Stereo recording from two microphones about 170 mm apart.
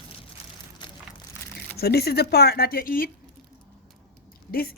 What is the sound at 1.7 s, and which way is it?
Speech, 70° left (ahead or behind).